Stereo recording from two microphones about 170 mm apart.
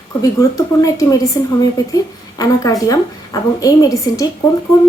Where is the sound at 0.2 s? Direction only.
20° left (ahead or behind).